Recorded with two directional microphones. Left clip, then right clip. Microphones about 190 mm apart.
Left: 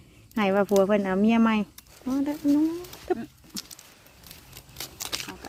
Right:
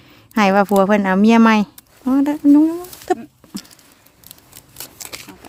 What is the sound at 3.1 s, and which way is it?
Speech, 40° right (ahead or behind).